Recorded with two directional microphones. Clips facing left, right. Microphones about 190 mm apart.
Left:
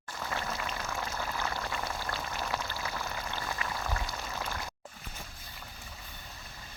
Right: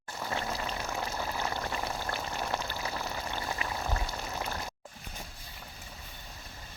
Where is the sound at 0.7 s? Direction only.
20° right (ahead or behind).